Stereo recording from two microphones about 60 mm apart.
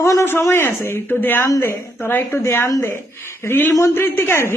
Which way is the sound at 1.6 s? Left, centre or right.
Left.